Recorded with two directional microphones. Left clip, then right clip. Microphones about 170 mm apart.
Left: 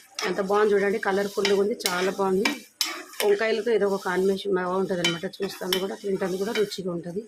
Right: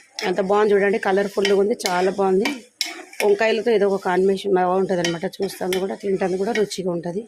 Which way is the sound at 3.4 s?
40° right (ahead or behind).